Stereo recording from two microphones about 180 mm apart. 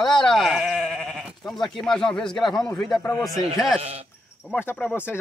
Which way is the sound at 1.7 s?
Centre (ahead or behind).